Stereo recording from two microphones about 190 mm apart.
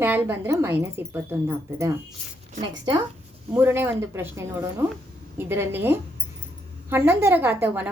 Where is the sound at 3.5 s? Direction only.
10° right (ahead or behind).